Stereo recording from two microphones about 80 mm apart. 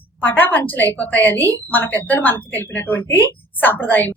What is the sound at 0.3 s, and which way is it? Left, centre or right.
A woman's voice, left.